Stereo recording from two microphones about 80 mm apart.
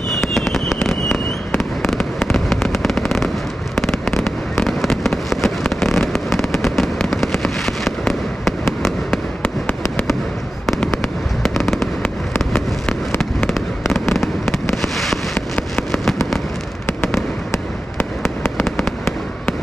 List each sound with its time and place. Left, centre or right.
0.3 s fireworks: centre
11.4 s fireworks: centre
13.5 s fireworks: centre
15.3 s fireworks: centre
17.5 s fireworks: left